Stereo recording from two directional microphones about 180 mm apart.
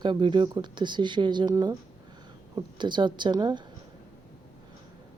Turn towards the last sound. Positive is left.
turn(degrees=-25)  # may be behind; listen again after turning